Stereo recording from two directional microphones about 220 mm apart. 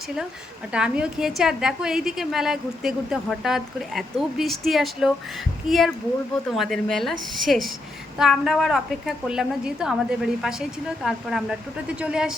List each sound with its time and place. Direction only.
0.7 s a woman's voice: 5° right (ahead or behind)